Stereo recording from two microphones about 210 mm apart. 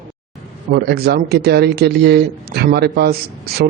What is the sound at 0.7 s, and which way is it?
Speech, 50° right (ahead or behind).